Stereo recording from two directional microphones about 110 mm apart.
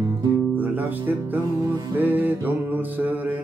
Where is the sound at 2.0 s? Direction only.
15° right (ahead or behind).